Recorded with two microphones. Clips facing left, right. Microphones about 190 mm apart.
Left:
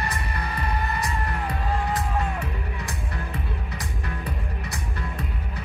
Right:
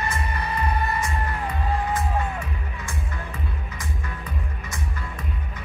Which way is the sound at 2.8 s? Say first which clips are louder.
Left 1 dB; 35° left (ahead or behind).